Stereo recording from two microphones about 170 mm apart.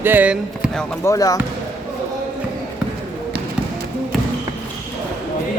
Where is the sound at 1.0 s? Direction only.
20° left (ahead or behind).